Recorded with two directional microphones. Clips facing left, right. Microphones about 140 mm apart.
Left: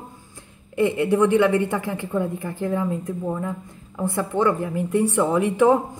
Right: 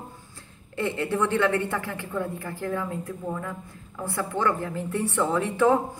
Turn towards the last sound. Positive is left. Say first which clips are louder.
# left 4 dB
turn(degrees=15)  # may be behind; listen again after turning